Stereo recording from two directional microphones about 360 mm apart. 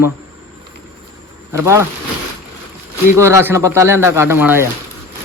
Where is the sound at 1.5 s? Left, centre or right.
Centre.